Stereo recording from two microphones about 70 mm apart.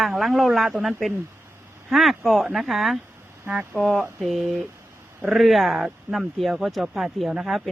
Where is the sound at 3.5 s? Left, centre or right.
Centre.